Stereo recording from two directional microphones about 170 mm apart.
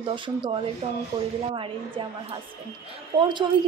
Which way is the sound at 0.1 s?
30° right (ahead or behind).